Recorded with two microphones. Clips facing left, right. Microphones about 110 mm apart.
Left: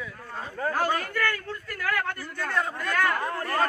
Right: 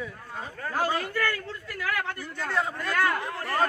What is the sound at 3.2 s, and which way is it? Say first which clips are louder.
Speech: left 4 dB; 40° left (ahead or behind).